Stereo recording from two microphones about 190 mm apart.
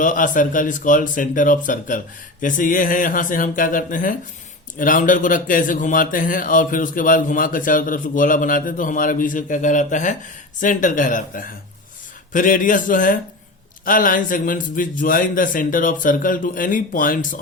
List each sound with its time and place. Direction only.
0.0 s a man's voice: 45° left (ahead or behind)